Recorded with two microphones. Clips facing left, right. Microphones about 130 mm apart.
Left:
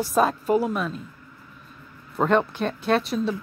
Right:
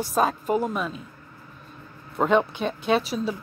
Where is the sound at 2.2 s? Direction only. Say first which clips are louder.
Even; centre (ahead or behind).